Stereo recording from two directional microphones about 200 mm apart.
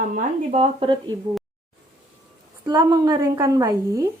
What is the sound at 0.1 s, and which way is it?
Speech, 30° right (ahead or behind).